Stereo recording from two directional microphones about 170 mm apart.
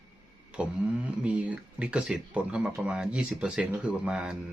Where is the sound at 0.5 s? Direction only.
5° right (ahead or behind).